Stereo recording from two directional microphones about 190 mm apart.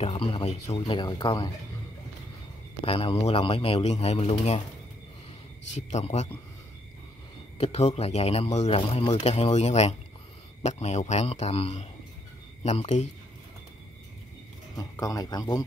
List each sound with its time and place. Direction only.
0.0 s speech: 30° left (ahead or behind)
2.8 s speech: 30° left (ahead or behind)
5.8 s speech: 35° left (ahead or behind)
7.5 s speech: 30° left (ahead or behind)
14.8 s speech: 20° left (ahead or behind)